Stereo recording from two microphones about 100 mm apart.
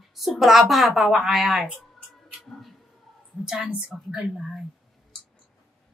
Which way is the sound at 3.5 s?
10° right (ahead or behind).